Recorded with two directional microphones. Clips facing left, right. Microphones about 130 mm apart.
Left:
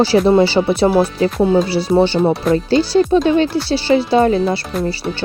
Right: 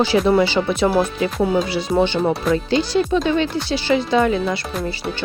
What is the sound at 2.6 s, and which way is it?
Speech, 35° left (ahead or behind).